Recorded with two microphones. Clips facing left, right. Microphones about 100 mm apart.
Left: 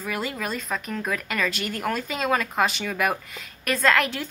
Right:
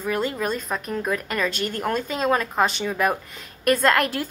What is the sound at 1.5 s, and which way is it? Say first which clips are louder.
Speech: right 2 dB; 40° right (ahead or behind).